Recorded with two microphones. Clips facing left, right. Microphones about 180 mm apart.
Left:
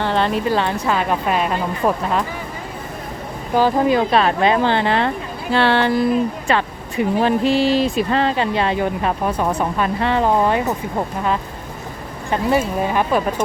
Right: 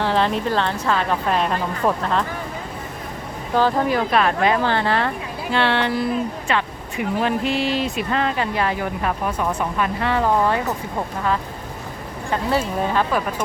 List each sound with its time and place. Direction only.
0.0 s speech: centre (ahead or behind)
3.5 s speech: 15° left (ahead or behind)
5.5 s speech: 40° left (ahead or behind); by 10.8 s 20° left (ahead or behind)
12.3 s speech: 15° left (ahead or behind)